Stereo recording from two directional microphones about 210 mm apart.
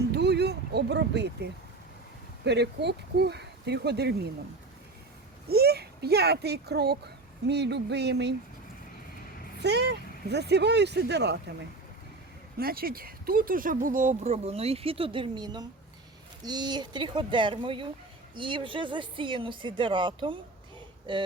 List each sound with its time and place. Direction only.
0.1 s a sound: 50° right (ahead or behind)
2.4 s speech: 55° right (ahead or behind)
5.5 s a child's voice: 50° right (ahead or behind)
9.6 s speech: 55° right (ahead or behind)
12.5 s speech: 45° right (ahead or behind); by 21.2 s 20° right (ahead or behind)